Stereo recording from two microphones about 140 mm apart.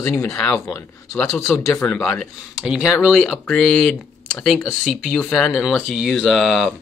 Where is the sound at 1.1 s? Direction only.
5° left (ahead or behind).